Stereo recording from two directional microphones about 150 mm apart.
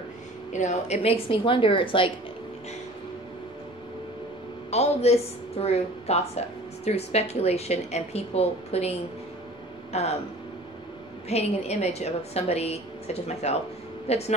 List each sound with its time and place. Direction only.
0.5 s a woman's voice: 50° left (ahead or behind); by 2.1 s 35° left (ahead or behind)
4.6 s a woman's voice: 45° left (ahead or behind)
9.9 s a woman's voice: 45° left (ahead or behind)
11.2 s a woman's voice: 45° left (ahead or behind)